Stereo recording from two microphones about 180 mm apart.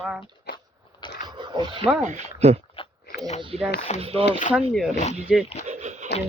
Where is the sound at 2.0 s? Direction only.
40° right (ahead or behind).